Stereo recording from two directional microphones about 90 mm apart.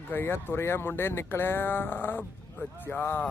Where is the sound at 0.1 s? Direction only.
25° left (ahead or behind).